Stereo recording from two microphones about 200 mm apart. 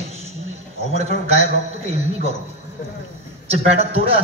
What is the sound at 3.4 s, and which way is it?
Speech, 30° right (ahead or behind).